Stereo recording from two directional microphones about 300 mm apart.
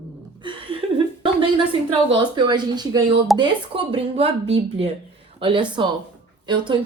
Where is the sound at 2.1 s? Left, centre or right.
Centre.